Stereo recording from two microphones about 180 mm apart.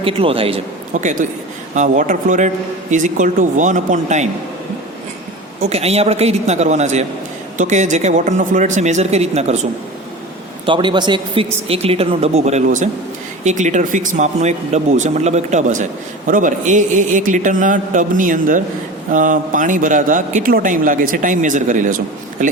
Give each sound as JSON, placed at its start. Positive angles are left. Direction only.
{"t": 0.0, "sound": "speech", "side_deg": -30}
{"t": 0.9, "sound": "speech", "side_deg": -45}
{"t": 5.6, "sound": "speech", "side_deg": -35}
{"t": 10.7, "sound": "speech", "side_deg": -25}